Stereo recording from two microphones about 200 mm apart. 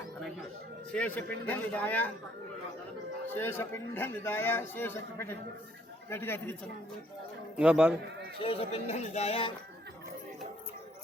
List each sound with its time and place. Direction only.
0.9 s a man's voice: 10° left (ahead or behind)
3.3 s a man's voice: 10° left (ahead or behind)
7.5 s a man's voice: 5° right (ahead or behind)
8.4 s speech: 30° left (ahead or behind)